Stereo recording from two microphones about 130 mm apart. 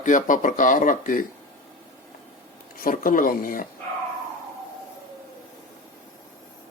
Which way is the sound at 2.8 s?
90° left.